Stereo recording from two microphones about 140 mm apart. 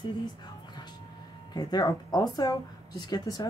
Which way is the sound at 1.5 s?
30° left (ahead or behind).